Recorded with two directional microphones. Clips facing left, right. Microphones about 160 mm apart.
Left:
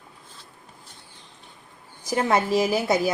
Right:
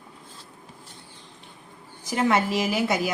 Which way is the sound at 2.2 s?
35° left (ahead or behind).